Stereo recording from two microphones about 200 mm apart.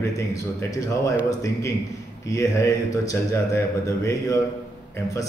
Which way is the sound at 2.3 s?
15° left (ahead or behind).